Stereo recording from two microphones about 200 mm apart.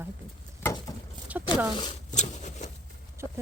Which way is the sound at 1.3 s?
10° right (ahead or behind).